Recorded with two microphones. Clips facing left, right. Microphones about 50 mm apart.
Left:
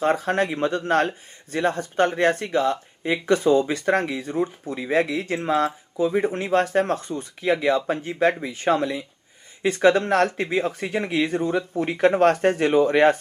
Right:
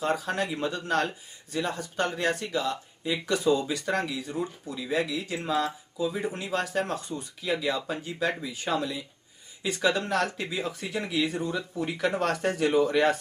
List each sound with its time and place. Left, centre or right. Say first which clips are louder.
0.0 s speech: left 7 dB; left